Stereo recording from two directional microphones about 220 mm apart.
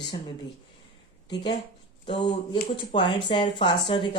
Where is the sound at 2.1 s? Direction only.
20° left (ahead or behind).